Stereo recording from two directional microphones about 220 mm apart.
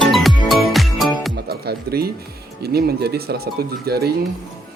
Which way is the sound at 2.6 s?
45° right (ahead or behind).